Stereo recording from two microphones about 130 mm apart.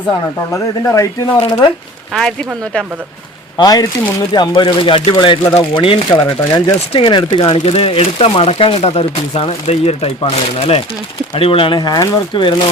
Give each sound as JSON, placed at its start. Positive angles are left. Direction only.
{"t": 0.1, "sound": "speech", "side_deg": 25}
{"t": 1.4, "sound": "speech", "side_deg": 35}
{"t": 2.1, "sound": "speech", "side_deg": 5}
{"t": 3.6, "sound": "speech", "side_deg": 30}